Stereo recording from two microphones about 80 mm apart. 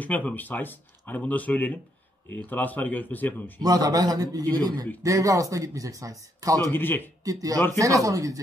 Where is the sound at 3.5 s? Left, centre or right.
Right.